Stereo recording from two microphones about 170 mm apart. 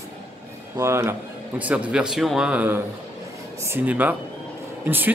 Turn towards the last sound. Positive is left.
turn(degrees=-10)  # may be behind; listen again after turning